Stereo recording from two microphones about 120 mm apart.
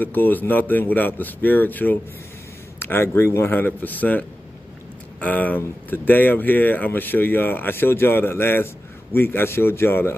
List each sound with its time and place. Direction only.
0.0 s speech: 15° left (ahead or behind)